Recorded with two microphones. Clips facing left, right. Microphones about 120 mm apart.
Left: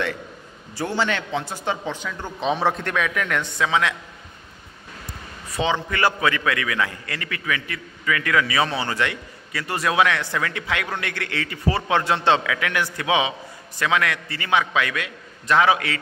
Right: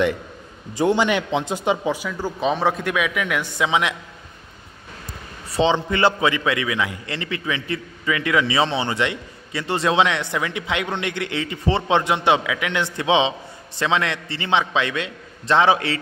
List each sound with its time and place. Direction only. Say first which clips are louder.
0.7 s speech: right 6 dB; 15° right (ahead or behind)
5.6 s a man's voice: right 4 dB; 25° right (ahead or behind)